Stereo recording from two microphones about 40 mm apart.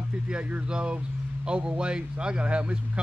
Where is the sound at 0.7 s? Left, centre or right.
Right.